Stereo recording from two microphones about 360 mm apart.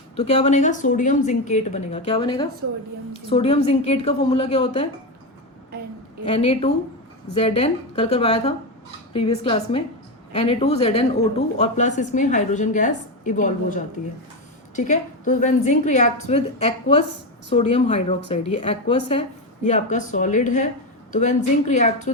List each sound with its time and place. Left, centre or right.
0.2 s a woman's voice: centre
6.2 s a woman's voice: centre